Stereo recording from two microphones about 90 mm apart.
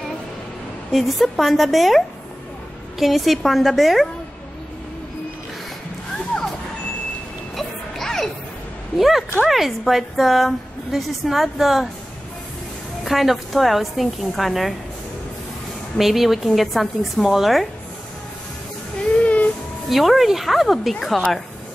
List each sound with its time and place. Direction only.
0.9 s a woman's voice: centre (ahead or behind)
7.5 s music: 5° left (ahead or behind)
8.9 s a woman's voice: centre (ahead or behind)
13.0 s a woman's voice: centre (ahead or behind)
16.0 s a woman's voice: centre (ahead or behind)
19.2 s a sound: 15° left (ahead or behind)
19.9 s a woman's voice: centre (ahead or behind)